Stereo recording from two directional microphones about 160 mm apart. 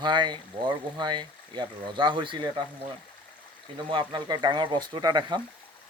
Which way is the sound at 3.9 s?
30° right (ahead or behind).